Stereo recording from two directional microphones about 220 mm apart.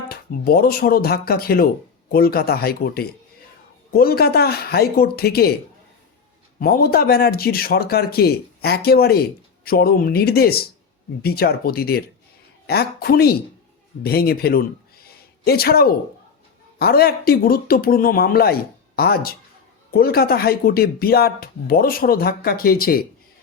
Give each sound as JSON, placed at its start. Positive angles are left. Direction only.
{"t": 0.1, "sound": "speech", "side_deg": 45}
{"t": 6.6, "sound": "speech", "side_deg": 45}
{"t": 15.0, "sound": "a sound", "side_deg": 45}
{"t": 16.7, "sound": "speech", "side_deg": 45}